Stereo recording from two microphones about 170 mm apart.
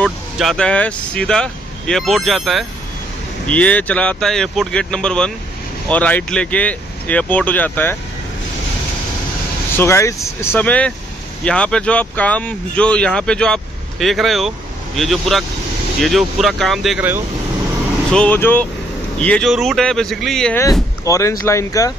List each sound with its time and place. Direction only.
0.0 s speech: 5° left (ahead or behind)
9.8 s speech: 15° left (ahead or behind); by 17.1 s centre (ahead or behind)
18.1 s speech: 10° left (ahead or behind)
21.0 s speech: 20° left (ahead or behind)